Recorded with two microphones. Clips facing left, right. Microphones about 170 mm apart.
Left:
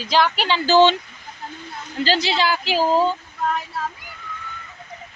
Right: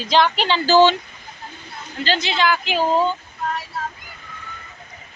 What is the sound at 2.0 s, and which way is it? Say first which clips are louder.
Speech: left 1 dB; 35° left (ahead or behind).